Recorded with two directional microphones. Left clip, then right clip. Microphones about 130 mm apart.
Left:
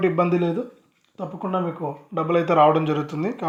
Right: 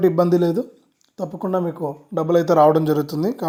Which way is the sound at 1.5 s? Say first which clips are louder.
Right 3 dB; 10° right (ahead or behind).